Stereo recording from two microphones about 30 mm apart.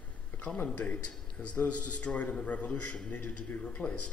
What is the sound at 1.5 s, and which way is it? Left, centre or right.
A man's voice, left.